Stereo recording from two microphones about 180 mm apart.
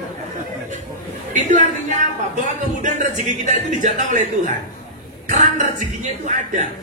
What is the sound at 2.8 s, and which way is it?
A man's voice, 45° right (ahead or behind).